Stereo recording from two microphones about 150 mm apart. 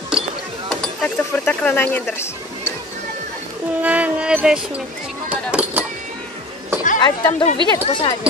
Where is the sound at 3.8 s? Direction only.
10° right (ahead or behind).